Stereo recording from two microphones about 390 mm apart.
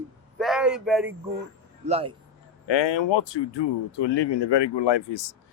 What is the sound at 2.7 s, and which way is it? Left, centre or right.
Speech, left.